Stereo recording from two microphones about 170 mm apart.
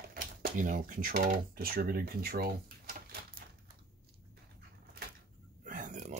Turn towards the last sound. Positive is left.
turn(degrees=-50)  # may be behind; listen again after turning